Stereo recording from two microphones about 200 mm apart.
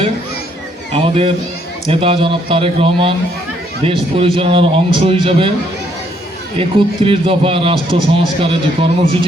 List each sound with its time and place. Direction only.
0.9 s a man's voice: 25° right (ahead or behind)
6.6 s a man's voice: 25° right (ahead or behind)